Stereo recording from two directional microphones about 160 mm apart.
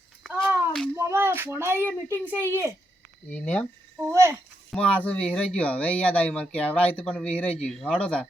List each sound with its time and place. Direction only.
0.2 s a sound: 5° left (ahead or behind)
0.9 s speech: 15° right (ahead or behind)
3.2 s speech: 10° left (ahead or behind)
4.0 s speech: 15° right (ahead or behind)
4.7 s speech: 5° left (ahead or behind)